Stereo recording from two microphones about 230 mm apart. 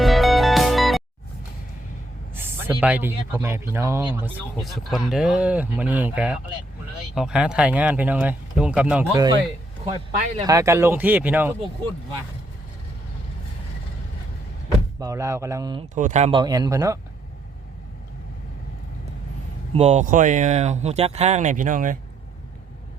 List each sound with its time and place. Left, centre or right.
0.0 s music: centre
2.3 s speech: centre
4.6 s speech: centre
14.9 s speech: centre
16.0 s speech: right; by 17.0 s centre
19.7 s speech: right